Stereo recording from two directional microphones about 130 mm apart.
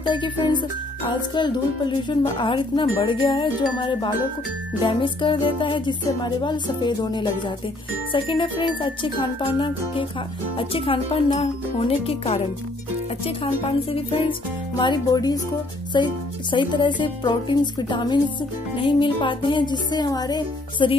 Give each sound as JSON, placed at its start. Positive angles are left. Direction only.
{"t": 0.0, "sound": "speech", "side_deg": 35}
{"t": 14.8, "sound": "speech", "side_deg": 30}